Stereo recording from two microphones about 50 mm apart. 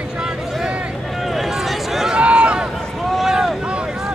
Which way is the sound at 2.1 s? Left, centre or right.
Right.